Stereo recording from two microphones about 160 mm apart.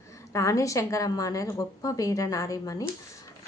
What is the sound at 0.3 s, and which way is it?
Speech, 20° left (ahead or behind).